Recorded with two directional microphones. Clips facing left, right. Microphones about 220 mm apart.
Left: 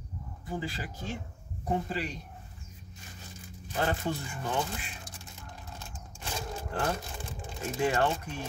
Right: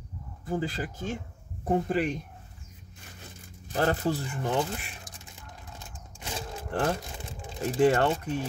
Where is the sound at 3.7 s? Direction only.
35° right (ahead or behind).